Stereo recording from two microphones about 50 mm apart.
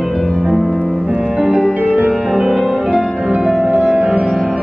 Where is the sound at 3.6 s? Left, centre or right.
Centre.